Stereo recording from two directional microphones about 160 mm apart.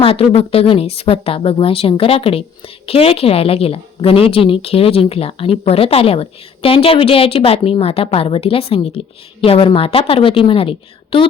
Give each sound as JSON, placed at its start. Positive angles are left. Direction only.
{"t": 0.0, "sound": "a woman's voice", "side_deg": 35}